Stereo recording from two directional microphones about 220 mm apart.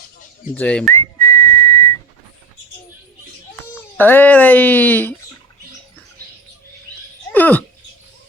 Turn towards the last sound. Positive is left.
turn(degrees=10)  # may be behind; listen again after turning